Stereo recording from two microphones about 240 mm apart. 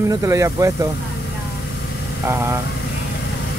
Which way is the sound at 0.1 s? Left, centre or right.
Centre.